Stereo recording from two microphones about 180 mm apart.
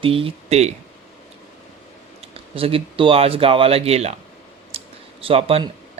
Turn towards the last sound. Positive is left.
turn(degrees=-30)  # may be behind; listen again after turning